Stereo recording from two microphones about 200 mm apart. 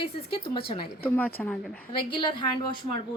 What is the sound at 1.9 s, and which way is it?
Speech, 25° left (ahead or behind).